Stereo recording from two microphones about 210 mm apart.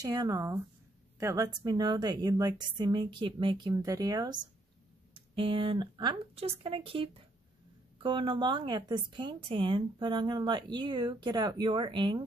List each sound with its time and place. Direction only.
0.0 s a woman's voice: 20° right (ahead or behind)